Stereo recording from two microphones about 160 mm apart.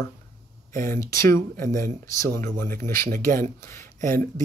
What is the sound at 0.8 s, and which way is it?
Speech, 15° left (ahead or behind).